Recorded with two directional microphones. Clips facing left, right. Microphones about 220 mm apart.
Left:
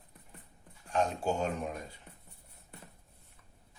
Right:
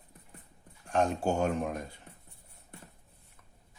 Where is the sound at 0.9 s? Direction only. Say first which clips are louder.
Right 3 dB; 50° right (ahead or behind).